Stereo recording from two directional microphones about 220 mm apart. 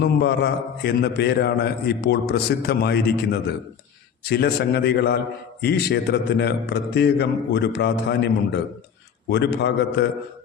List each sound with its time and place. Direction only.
0.0 s a man's voice: 50° left (ahead or behind)
4.3 s a man's voice: 45° left (ahead or behind)